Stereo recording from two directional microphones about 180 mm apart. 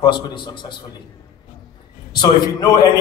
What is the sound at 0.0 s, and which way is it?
Speech, 25° left (ahead or behind).